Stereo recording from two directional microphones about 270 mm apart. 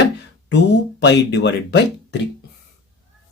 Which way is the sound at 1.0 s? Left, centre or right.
Left.